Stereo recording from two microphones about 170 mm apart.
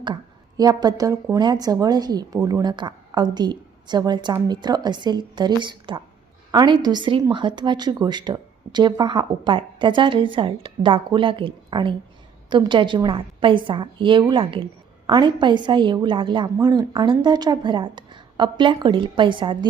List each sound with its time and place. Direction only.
0.0 s speech: 25° right (ahead or behind)